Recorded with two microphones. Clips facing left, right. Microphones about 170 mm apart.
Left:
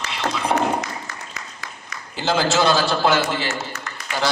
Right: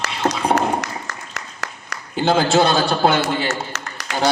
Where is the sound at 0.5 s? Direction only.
75° right (ahead or behind).